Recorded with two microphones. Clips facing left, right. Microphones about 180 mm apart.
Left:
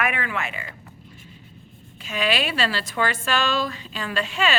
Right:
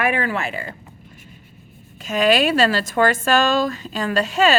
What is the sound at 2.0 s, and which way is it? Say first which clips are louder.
A woman's voice: right 8 dB; 45° right (ahead or behind).